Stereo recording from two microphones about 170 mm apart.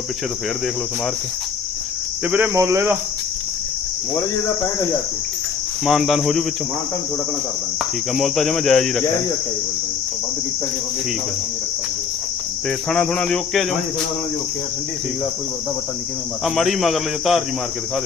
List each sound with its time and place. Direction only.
2.2 s speech: 10° right (ahead or behind)
5.8 s speech: centre (ahead or behind)
8.1 s speech: centre (ahead or behind)
12.9 s speech: 5° left (ahead or behind)
16.4 s speech: centre (ahead or behind)